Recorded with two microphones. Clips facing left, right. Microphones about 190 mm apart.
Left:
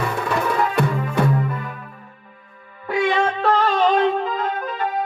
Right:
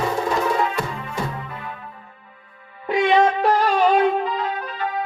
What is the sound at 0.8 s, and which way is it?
Music, 55° left (ahead or behind).